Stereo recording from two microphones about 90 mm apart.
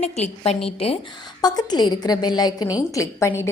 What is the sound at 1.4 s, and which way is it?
A woman's voice, 50° left (ahead or behind).